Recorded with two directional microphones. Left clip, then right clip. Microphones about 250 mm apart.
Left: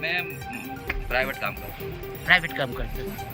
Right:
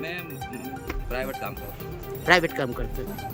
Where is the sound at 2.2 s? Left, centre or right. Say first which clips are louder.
Even; right.